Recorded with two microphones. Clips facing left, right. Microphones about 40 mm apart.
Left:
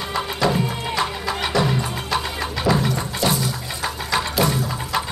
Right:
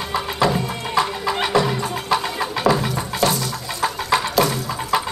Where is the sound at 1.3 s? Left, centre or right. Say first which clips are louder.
Right 6 dB; centre.